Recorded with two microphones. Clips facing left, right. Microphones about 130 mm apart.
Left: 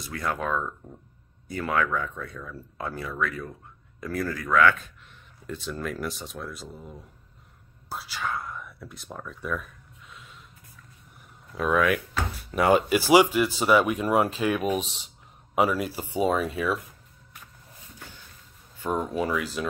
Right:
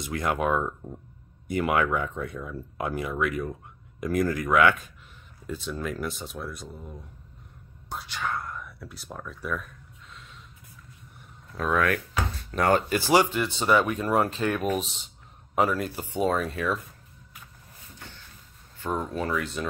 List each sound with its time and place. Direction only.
0.0 s speech: 20° right (ahead or behind)
5.5 s speech: centre (ahead or behind)
7.9 s whispering: 5° left (ahead or behind)
11.5 s speech: centre (ahead or behind)
18.9 s speech: 5° left (ahead or behind)